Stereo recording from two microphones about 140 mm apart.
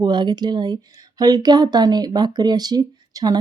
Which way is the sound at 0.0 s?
30° right (ahead or behind).